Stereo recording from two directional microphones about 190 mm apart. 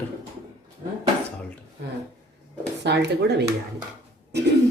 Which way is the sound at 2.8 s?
65° right (ahead or behind).